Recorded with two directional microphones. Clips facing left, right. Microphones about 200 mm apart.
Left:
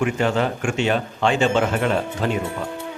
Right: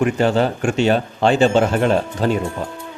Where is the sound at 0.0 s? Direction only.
35° right (ahead or behind).